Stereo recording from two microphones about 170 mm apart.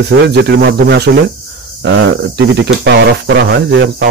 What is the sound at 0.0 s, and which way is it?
Speech, 70° right (ahead or behind).